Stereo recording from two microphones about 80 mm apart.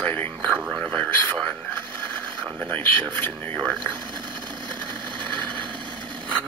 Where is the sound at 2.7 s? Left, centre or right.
Left.